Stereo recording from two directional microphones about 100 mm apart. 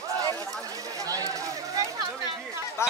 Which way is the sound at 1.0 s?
35° right (ahead or behind).